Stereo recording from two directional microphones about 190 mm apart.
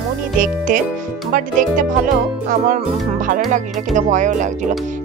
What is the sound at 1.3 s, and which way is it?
Speech, 45° right (ahead or behind).